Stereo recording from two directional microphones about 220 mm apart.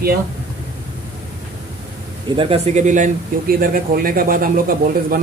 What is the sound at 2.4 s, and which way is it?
A man's voice, 25° right (ahead or behind).